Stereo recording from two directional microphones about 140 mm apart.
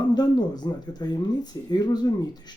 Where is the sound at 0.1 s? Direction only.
30° left (ahead or behind).